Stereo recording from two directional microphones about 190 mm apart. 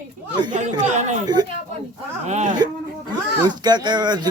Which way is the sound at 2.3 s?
40° right (ahead or behind).